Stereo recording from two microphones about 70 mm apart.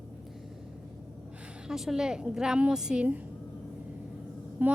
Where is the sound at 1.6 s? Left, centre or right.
Centre.